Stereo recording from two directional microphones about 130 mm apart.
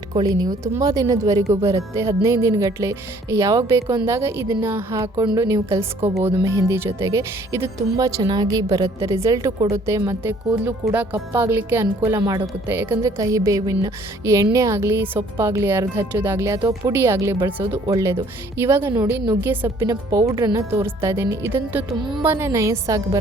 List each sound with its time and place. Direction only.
0.1 s a woman's voice: 30° right (ahead or behind)
17.6 s speech: 35° right (ahead or behind)
18.6 s a woman's voice: 20° right (ahead or behind)